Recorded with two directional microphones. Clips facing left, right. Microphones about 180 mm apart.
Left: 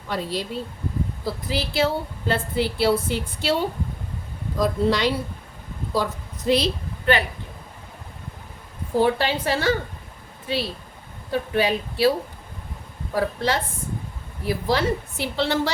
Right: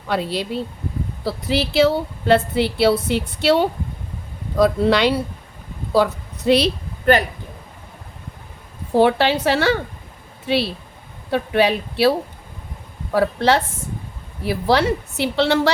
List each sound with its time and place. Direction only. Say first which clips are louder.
0.1 s a woman's voice: right 5 dB; 70° right (ahead or behind)
7.0 s speech: right 5 dB; 40° right (ahead or behind)
9.0 s a woman's voice: right 5 dB; 75° right (ahead or behind)
13.1 s a woman's voice: right 6 dB; 70° right (ahead or behind)